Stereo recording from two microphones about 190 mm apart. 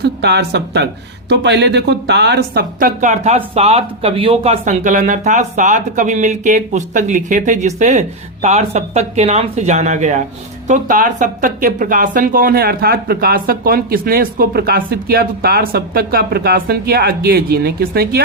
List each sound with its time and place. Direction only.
0.0 s a woman's voice: 60° right (ahead or behind)